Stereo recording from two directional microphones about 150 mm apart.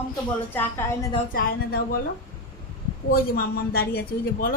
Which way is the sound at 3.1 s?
75° left (ahead or behind).